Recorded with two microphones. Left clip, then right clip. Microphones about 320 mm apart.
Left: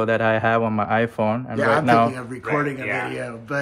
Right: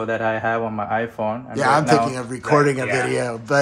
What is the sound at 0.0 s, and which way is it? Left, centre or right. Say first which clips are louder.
Speech: left 2 dB; left.